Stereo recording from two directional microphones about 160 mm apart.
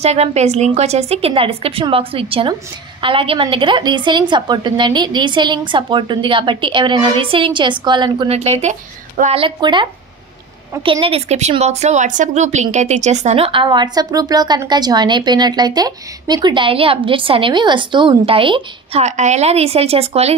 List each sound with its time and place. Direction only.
0.0 s a woman's voice: 40° right (ahead or behind)
8.3 s speech: 40° right (ahead or behind)
9.4 s speech: 30° right (ahead or behind)